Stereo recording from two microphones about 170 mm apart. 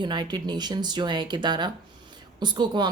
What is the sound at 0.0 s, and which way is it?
Speech, 25° right (ahead or behind).